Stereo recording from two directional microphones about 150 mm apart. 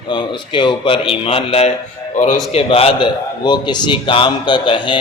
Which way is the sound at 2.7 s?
40° left (ahead or behind).